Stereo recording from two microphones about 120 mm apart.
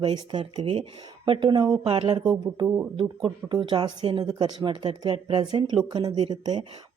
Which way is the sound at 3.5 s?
40° right (ahead or behind).